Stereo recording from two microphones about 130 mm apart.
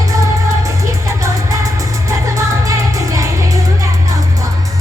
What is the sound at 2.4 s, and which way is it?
Music, 25° right (ahead or behind).